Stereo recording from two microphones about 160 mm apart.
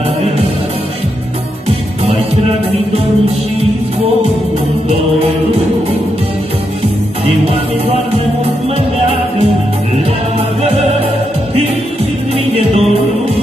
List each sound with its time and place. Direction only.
6.8 s music: 40° right (ahead or behind)
12.5 s music: 40° right (ahead or behind)